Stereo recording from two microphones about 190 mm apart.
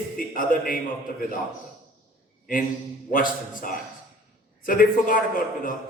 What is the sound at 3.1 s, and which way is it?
A man's voice, 45° left (ahead or behind).